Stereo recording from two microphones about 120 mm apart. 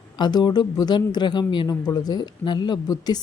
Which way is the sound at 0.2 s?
35° left (ahead or behind).